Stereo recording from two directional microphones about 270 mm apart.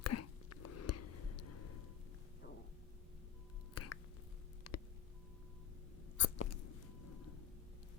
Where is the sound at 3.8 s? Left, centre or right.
Left.